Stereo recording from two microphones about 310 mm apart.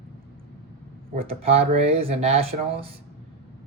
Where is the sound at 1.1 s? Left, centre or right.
Centre.